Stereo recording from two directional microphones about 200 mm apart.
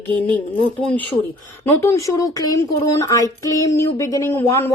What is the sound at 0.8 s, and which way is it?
Speech, 5° left (ahead or behind).